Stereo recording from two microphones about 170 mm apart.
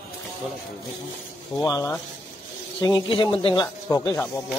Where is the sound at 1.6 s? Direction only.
20° left (ahead or behind).